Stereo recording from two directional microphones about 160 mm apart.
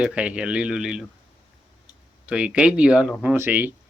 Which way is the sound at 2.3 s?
5° right (ahead or behind).